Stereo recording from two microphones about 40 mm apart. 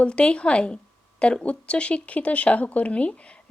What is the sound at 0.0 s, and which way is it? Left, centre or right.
A woman's voice, left.